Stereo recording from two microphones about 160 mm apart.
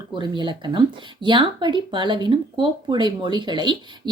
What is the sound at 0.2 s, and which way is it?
Speech, 30° right (ahead or behind).